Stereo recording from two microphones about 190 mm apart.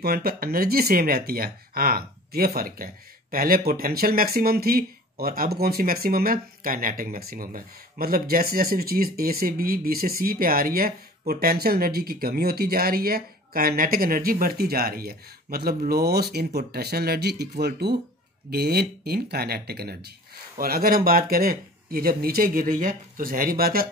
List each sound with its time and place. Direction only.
0.0 s speech: 55° right (ahead or behind)